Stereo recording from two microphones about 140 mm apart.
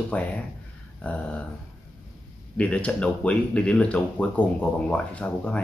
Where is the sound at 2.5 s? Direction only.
10° left (ahead or behind).